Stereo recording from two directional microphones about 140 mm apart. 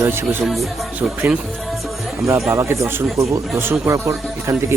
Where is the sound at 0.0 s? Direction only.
15° right (ahead or behind).